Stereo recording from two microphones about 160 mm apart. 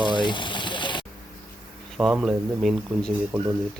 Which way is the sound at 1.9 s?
5° right (ahead or behind).